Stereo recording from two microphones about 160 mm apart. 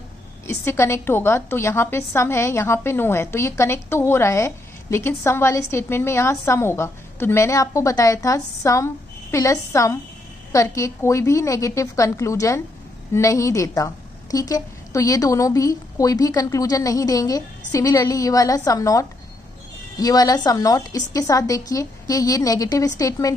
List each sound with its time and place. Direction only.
0.5 s a woman's voice: 15° left (ahead or behind)